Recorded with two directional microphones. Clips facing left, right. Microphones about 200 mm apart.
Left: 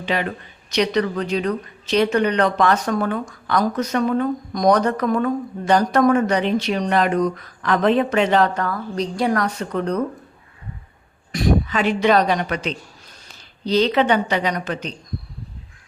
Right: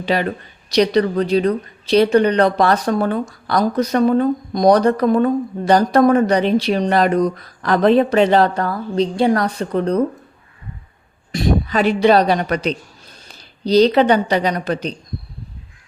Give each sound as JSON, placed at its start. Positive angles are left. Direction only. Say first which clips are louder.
{"t": 0.0, "sound": "speech", "louder": "right 4 dB", "side_deg": -35}
{"t": 11.3, "sound": "a woman's voice", "louder": "right 1 dB", "side_deg": -25}